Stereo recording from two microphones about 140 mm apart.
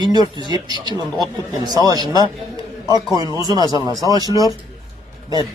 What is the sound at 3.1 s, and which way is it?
Speech, 25° right (ahead or behind).